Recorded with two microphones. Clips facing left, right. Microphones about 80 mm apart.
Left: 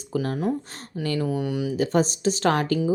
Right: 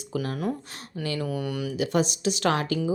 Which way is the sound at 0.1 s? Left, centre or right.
Left.